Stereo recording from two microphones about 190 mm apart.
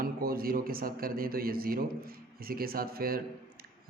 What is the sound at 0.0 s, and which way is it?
A man's voice, 50° right (ahead or behind).